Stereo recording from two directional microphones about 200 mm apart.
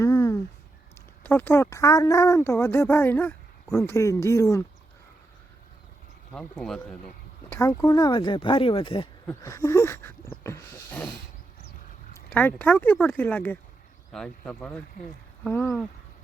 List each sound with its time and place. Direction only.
0.0 s a sound: 15° left (ahead or behind)
1.2 s speech: 10° left (ahead or behind)
6.3 s speech: 5° left (ahead or behind)
7.5 s speech: 15° left (ahead or behind)
9.2 s speech: 15° left (ahead or behind)
12.1 s speech: 10° left (ahead or behind)